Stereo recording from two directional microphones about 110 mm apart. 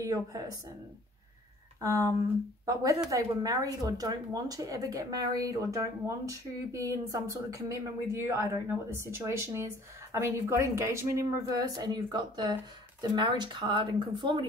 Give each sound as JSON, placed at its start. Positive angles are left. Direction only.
{"t": 0.0, "sound": "speech", "side_deg": -30}
{"t": 1.8, "sound": "speech", "side_deg": -30}
{"t": 11.5, "sound": "speech", "side_deg": -35}